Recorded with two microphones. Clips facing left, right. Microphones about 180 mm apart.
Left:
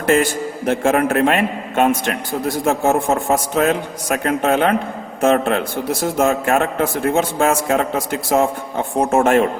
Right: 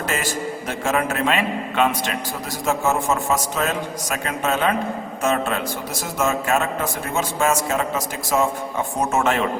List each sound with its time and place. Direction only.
0.0 s a man's voice: 55° left (ahead or behind)